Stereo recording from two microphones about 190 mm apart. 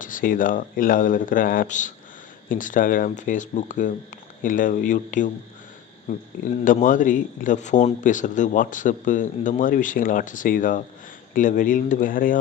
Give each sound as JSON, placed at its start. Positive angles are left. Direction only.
{"t": 0.0, "sound": "speech", "side_deg": 45}